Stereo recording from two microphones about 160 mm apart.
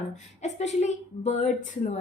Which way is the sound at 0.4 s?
45° left (ahead or behind).